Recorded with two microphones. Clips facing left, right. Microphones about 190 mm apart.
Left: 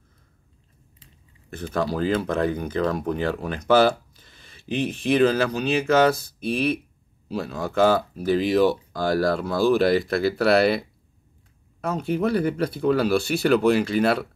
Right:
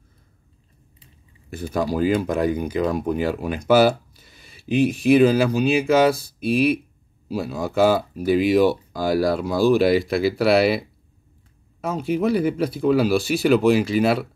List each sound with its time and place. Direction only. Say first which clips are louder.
1.5 s speech: right 2 dB; 10° right (ahead or behind)